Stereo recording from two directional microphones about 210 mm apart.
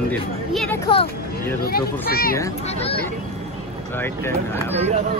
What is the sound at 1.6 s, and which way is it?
Speech, 45° left (ahead or behind).